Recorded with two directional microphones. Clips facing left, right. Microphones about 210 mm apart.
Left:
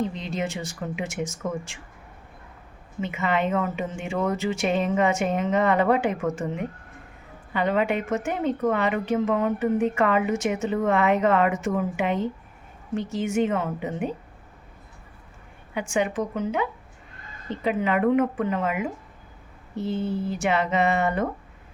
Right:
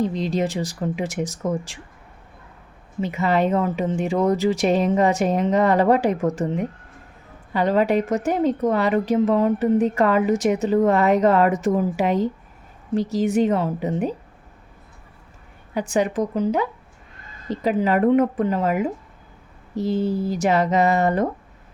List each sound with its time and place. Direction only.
0.0 s a woman's voice: 35° right (ahead or behind)
3.0 s a woman's voice: 35° right (ahead or behind)
7.5 s a woman's voice: 35° right (ahead or behind)
15.7 s a woman's voice: 35° right (ahead or behind)